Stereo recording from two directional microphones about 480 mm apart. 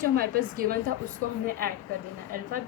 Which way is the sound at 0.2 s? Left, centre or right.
Centre.